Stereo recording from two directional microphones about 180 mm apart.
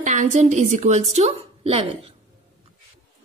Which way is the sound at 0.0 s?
45° right (ahead or behind).